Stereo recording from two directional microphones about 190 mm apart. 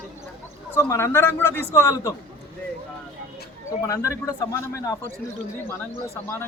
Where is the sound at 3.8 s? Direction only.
15° left (ahead or behind).